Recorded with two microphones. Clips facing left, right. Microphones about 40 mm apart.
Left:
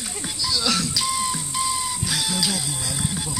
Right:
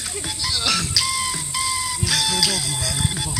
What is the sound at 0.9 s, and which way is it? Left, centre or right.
Music, right.